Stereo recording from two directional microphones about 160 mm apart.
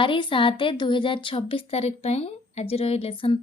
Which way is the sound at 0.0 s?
30° left (ahead or behind).